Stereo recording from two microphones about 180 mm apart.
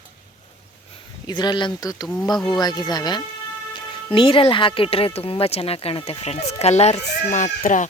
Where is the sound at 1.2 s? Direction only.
25° left (ahead or behind).